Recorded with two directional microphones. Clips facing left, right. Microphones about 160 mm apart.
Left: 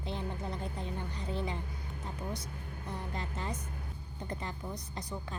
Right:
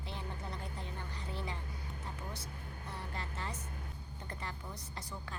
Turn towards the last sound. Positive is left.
turn(degrees=20)  # may be behind; listen again after turning